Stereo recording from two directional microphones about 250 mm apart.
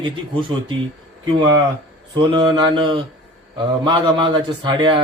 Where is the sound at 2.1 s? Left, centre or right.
Centre.